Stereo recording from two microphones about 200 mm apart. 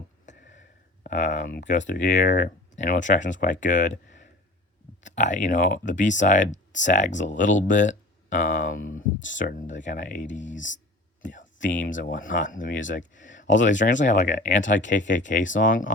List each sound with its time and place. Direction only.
0.3 s a sound: 40° left (ahead or behind)
2.0 s speech: 40° left (ahead or behind)
9.2 s speech: 70° left (ahead or behind)
10.0 s speech: 40° left (ahead or behind)
11.3 s a sound: 40° left (ahead or behind)
11.9 s speech: 40° left (ahead or behind)
14.6 s speech: 65° left (ahead or behind)
14.8 s speech: 40° left (ahead or behind)